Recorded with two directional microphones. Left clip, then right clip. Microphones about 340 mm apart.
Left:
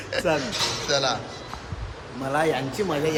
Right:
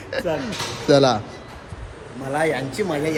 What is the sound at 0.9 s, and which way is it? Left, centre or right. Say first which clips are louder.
Speech: right 10 dB; centre.